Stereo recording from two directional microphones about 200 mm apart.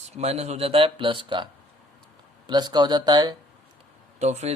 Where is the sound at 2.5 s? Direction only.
20° right (ahead or behind).